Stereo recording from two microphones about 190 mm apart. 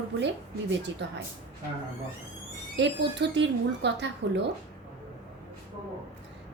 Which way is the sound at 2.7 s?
65° right (ahead or behind).